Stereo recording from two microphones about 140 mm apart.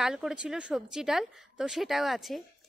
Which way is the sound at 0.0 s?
5° right (ahead or behind).